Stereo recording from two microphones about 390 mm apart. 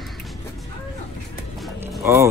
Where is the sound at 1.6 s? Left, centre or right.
Centre.